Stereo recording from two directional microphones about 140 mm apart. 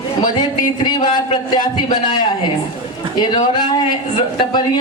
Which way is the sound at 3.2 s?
30° left (ahead or behind).